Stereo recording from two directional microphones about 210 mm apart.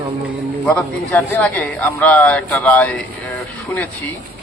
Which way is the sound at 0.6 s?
10° left (ahead or behind).